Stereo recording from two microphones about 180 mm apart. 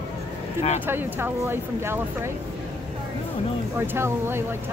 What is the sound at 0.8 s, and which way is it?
Speech, 10° right (ahead or behind).